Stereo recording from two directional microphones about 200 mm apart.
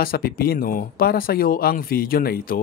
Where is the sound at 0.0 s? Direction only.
50° left (ahead or behind).